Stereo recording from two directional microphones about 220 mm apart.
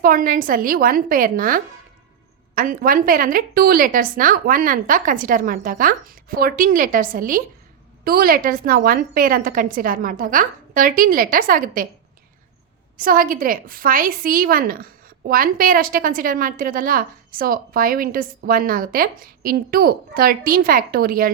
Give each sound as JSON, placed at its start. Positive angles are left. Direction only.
{"t": 0.0, "sound": "a woman's voice", "side_deg": -40}
{"t": 13.0, "sound": "a woman's voice", "side_deg": -40}